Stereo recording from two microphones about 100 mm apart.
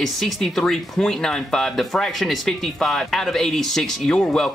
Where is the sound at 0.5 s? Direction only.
5° left (ahead or behind).